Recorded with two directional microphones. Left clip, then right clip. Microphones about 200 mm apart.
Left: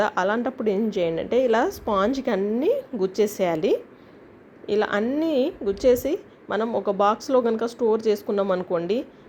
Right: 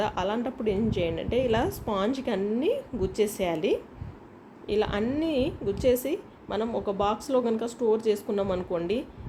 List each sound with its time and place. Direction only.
0.0 s a woman's voice: 20° left (ahead or behind)